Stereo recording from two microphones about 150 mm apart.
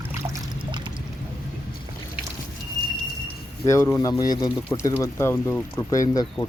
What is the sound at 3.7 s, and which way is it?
Speech, 20° left (ahead or behind).